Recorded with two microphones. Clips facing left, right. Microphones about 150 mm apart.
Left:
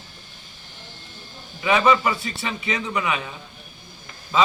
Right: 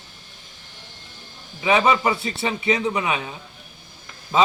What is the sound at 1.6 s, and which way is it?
A man's voice, 20° right (ahead or behind).